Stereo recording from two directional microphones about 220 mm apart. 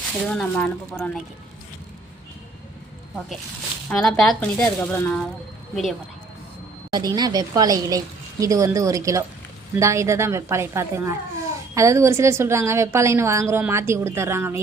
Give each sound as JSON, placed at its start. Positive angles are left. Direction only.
{"t": 0.3, "sound": "speech", "side_deg": 5}
{"t": 3.8, "sound": "speech", "side_deg": 0}
{"t": 6.9, "sound": "a woman's voice", "side_deg": -20}